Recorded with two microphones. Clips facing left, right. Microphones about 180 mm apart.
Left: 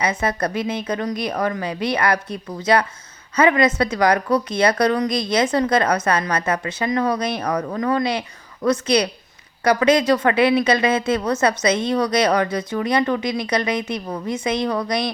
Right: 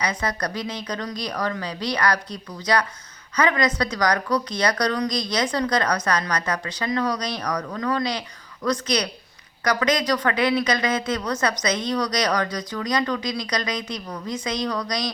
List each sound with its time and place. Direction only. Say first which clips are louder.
0.0 s a woman's voice: left 5 dB; 25° left (ahead or behind)